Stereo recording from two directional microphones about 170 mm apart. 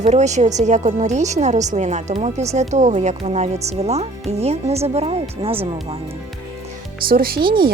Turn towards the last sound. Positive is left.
turn(degrees=-30)  # may be behind; listen again after turning